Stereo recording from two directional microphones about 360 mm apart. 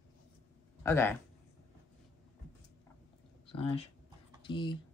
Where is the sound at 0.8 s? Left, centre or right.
Centre.